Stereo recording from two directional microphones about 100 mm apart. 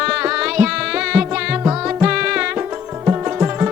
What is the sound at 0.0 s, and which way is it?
Music, 10° right (ahead or behind).